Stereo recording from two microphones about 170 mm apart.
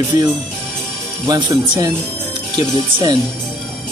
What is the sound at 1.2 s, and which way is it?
Speech, 25° right (ahead or behind).